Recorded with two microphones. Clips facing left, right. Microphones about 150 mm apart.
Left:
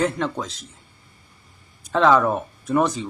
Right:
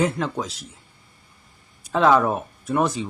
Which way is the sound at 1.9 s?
5° right (ahead or behind).